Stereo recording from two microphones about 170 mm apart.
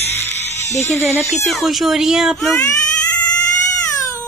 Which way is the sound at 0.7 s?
15° left (ahead or behind).